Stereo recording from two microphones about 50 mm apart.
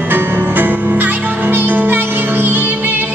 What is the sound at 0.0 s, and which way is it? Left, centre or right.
Music, right.